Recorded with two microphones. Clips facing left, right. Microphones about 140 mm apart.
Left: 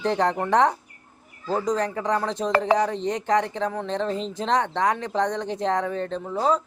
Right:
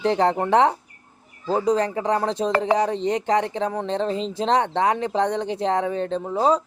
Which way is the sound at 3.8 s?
25° right (ahead or behind).